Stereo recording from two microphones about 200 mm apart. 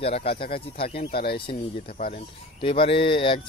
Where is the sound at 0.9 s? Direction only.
50° left (ahead or behind).